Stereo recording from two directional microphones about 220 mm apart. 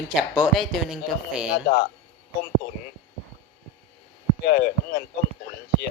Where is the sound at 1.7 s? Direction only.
45° left (ahead or behind).